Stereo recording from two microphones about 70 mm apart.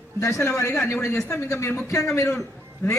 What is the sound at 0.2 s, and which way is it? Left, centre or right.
A man's voice, left.